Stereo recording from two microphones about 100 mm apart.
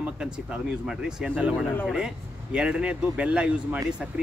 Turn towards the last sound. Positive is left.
turn(degrees=-5)  # may be behind; listen again after turning